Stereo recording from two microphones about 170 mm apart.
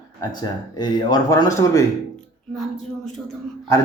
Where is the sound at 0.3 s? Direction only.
25° left (ahead or behind).